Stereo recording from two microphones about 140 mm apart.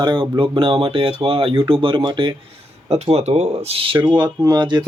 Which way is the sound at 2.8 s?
50° right (ahead or behind).